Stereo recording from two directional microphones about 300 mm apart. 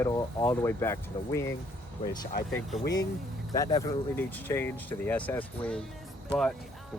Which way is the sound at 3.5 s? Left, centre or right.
Centre.